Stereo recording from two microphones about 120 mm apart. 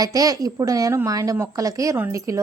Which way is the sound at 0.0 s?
30° right (ahead or behind).